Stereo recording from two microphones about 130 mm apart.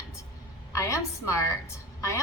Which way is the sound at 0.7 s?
25° left (ahead or behind).